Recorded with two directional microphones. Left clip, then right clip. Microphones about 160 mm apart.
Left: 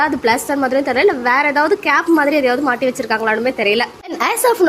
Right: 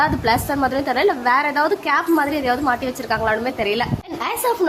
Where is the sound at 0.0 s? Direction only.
15° left (ahead or behind).